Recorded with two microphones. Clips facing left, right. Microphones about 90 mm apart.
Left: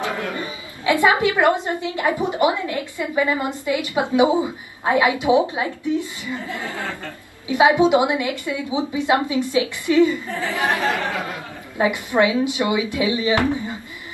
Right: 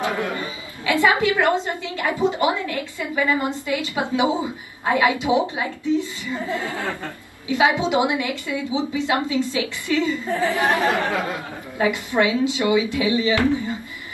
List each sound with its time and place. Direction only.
0.3 s a woman's voice: 20° left (ahead or behind)
6.3 s speech: 20° right (ahead or behind)
7.4 s a woman's voice: 20° left (ahead or behind)
10.2 s speech: 20° right (ahead or behind)
11.8 s a woman's voice: 20° left (ahead or behind)